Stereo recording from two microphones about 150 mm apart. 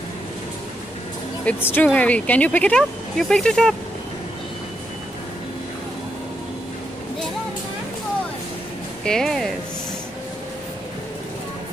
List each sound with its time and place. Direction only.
1.4 s speech: 10° left (ahead or behind)
9.0 s speech: 5° left (ahead or behind)